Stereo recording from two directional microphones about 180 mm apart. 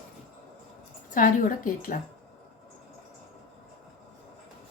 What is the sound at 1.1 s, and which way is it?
Speech, 50° left (ahead or behind).